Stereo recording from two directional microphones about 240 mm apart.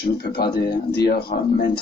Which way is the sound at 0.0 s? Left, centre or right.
Left.